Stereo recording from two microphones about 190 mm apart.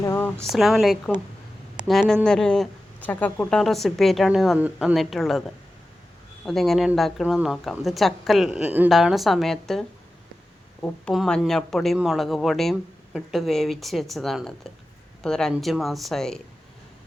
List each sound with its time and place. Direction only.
0.0 s a sound: 15° left (ahead or behind)
0.5 s speech: centre (ahead or behind)
6.4 s speech: centre (ahead or behind)
10.8 s speech: centre (ahead or behind)